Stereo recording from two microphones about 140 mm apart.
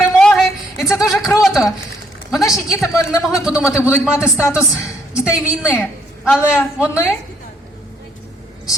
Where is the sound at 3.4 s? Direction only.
5° right (ahead or behind).